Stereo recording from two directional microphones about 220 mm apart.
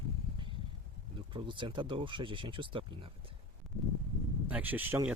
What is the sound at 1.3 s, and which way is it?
Speech, 20° right (ahead or behind).